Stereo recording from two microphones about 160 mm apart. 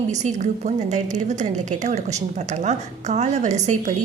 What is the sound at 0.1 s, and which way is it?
A woman's voice, 50° right (ahead or behind).